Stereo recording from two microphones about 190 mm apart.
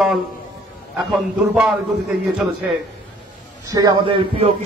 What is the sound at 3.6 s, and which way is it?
Speech, 20° right (ahead or behind).